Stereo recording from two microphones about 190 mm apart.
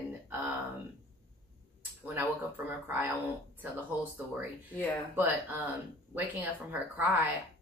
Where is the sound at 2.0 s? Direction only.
10° right (ahead or behind).